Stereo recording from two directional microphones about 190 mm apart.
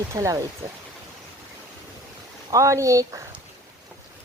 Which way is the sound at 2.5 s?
15° right (ahead or behind).